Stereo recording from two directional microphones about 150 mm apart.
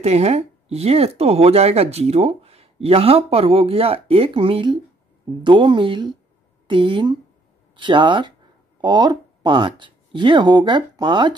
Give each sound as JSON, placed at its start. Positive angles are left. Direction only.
{"t": 0.0, "sound": "speech", "side_deg": -45}